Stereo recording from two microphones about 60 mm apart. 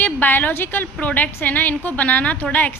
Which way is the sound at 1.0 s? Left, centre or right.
Left.